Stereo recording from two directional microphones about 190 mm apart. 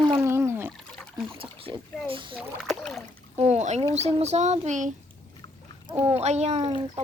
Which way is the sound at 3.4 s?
35° right (ahead or behind).